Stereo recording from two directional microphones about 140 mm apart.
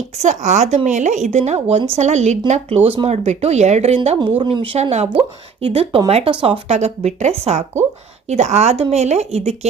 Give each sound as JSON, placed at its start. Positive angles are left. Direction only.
{"t": 0.2, "sound": "speech", "side_deg": -60}
{"t": 4.2, "sound": "speech", "side_deg": -35}